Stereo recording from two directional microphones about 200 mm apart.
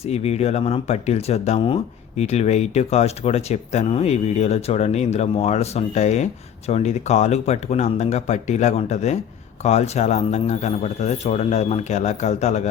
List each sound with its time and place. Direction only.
0.0 s speech: 30° left (ahead or behind)